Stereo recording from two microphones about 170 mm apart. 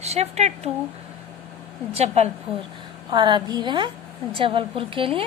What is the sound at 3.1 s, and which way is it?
A woman's voice, 25° right (ahead or behind).